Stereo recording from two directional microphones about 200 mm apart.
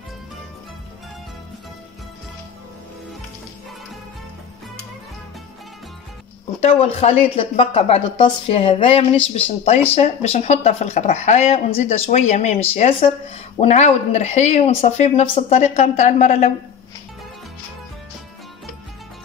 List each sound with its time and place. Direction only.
6.6 s speech: 30° left (ahead or behind)